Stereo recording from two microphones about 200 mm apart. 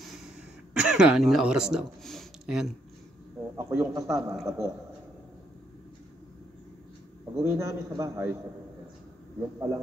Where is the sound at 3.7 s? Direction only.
15° right (ahead or behind).